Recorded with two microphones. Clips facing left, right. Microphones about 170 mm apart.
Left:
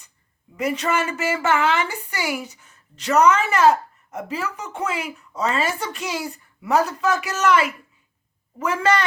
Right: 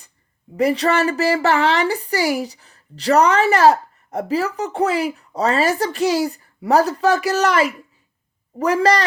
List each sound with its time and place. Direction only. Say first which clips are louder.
0.5 s a woman's voice: right 6 dB; 35° right (ahead or behind)